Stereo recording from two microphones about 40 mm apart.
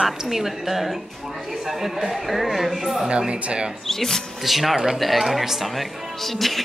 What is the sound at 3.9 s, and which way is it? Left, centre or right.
Speech, centre.